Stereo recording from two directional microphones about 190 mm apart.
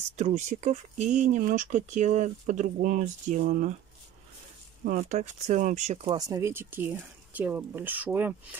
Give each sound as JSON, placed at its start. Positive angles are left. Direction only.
{"t": 0.2, "sound": "speech", "side_deg": -40}
{"t": 4.8, "sound": "speech", "side_deg": -40}
{"t": 6.1, "sound": "speech", "side_deg": -20}